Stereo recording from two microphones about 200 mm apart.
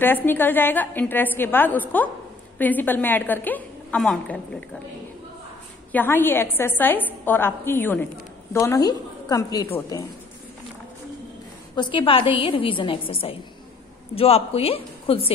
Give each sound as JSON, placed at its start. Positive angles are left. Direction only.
{"t": 0.0, "sound": "a woman's voice", "side_deg": 10}
{"t": 5.9, "sound": "a woman's voice", "side_deg": 10}
{"t": 11.7, "sound": "a woman's voice", "side_deg": 25}